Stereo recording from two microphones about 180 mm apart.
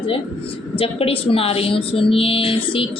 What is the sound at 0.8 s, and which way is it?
A woman's voice, 30° left (ahead or behind).